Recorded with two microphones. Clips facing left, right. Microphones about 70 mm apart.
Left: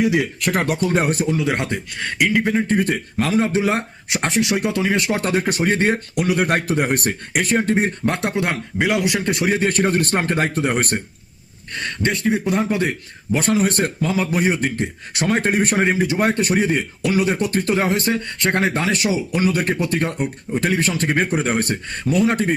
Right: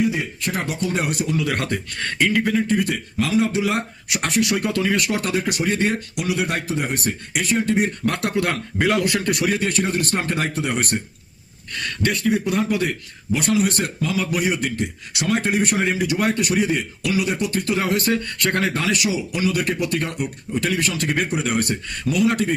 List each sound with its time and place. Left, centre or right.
0.0 s speech: left
2.0 s speech: centre
2.6 s a man's voice: left
11.7 s a man's voice: left